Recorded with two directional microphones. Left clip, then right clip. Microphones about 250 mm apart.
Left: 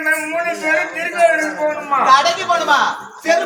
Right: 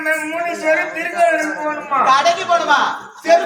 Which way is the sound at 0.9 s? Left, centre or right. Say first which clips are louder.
Left 1 dB; centre.